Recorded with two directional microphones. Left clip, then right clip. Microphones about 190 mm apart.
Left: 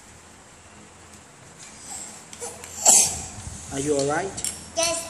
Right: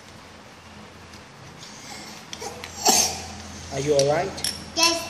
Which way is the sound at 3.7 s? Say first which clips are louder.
Right 3 dB; 20° left (ahead or behind).